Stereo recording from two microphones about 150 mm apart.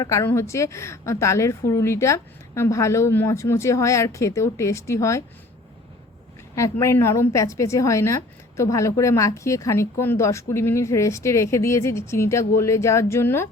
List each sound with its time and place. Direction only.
0.0 s a woman's voice: 20° left (ahead or behind)
6.6 s a woman's voice: 20° left (ahead or behind)